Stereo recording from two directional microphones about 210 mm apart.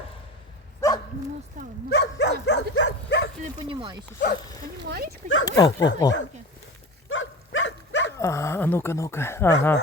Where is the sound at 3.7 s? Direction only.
25° right (ahead or behind).